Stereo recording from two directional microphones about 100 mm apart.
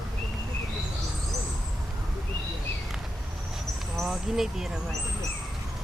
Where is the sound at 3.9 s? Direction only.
5° right (ahead or behind).